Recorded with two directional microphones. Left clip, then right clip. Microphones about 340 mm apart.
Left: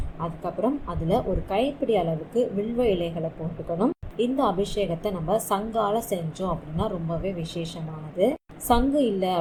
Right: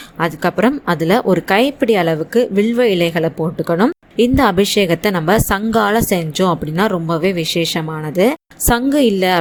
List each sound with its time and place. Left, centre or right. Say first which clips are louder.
0.2 s a woman's voice: right 12 dB; right